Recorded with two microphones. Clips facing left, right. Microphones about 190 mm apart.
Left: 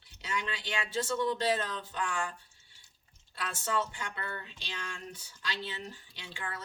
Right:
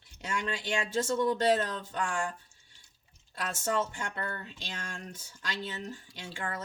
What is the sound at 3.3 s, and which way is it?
Speech, 45° right (ahead or behind).